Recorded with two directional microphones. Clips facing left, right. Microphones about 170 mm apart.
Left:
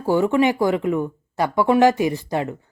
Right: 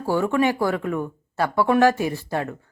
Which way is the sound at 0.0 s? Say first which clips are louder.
Left 3 dB; 15° left (ahead or behind).